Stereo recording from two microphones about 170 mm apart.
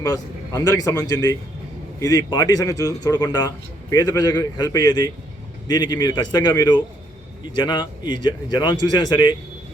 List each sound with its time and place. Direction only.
0.0 s a man's voice: 20° left (ahead or behind)